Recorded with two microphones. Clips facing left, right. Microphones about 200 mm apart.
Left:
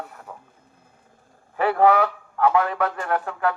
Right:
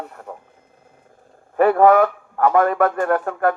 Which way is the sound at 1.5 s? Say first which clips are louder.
Right 5 dB; 50° right (ahead or behind).